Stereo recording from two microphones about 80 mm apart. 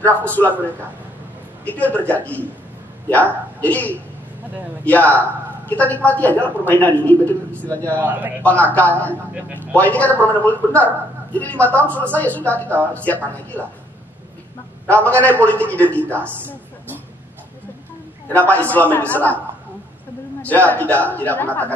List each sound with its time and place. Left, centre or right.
0.0 s a woman's voice: centre
2.0 s a woman's voice: centre
8.0 s a man's voice: right
8.4 s a woman's voice: centre
14.9 s a woman's voice: centre
18.3 s a woman's voice: centre
20.4 s a woman's voice: left